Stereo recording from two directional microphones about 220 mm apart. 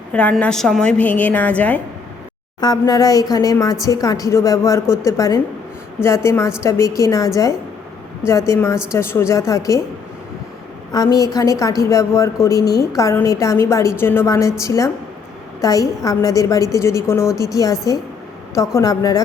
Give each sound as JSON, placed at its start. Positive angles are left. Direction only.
{"t": 0.1, "sound": "speech", "side_deg": 5}
{"t": 2.6, "sound": "speech", "side_deg": 20}
{"t": 8.3, "sound": "speech", "side_deg": 15}
{"t": 10.9, "sound": "speech", "side_deg": 15}